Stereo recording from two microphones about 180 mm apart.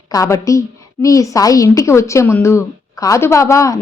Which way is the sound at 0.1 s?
20° left (ahead or behind).